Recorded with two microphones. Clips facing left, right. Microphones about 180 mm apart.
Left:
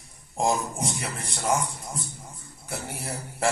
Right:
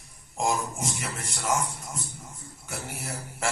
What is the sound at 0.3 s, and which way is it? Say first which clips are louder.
A man's voice: left 2 dB; 35° left (ahead or behind).